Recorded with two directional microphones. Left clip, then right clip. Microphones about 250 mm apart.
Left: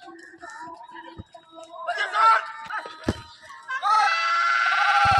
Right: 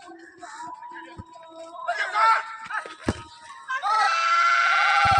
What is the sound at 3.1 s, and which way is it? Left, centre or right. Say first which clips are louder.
Music: even; centre.